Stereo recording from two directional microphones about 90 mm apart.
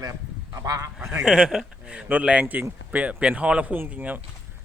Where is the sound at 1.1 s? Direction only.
10° right (ahead or behind).